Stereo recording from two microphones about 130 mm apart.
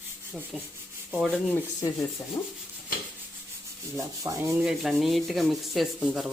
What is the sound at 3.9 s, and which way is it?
Rub, 25° right (ahead or behind).